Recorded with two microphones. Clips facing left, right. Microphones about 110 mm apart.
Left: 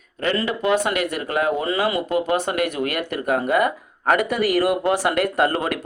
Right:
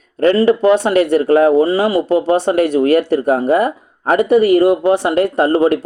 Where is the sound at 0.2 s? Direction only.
45° right (ahead or behind).